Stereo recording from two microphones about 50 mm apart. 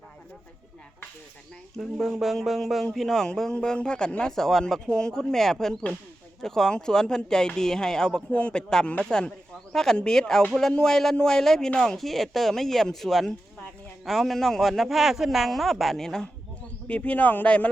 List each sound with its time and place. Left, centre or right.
1.8 s a man's voice: centre
3.5 s speech: centre
8.3 s speech: left
9.7 s a man's voice: centre
16.8 s speech: left